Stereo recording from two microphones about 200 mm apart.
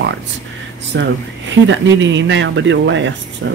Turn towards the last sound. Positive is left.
turn(degrees=-65)  # may be behind; listen again after turning